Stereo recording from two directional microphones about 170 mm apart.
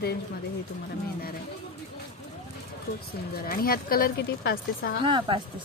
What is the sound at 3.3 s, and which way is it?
Speech, 60° left (ahead or behind).